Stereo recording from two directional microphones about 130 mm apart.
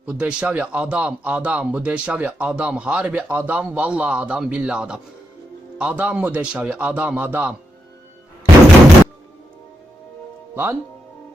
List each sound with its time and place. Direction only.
0.0 s a man's voice: 10° right (ahead or behind)
10.5 s speech: 15° right (ahead or behind)